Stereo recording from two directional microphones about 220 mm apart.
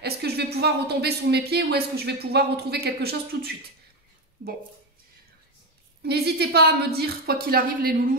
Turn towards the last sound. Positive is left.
turn(degrees=-40)  # may be behind; listen again after turning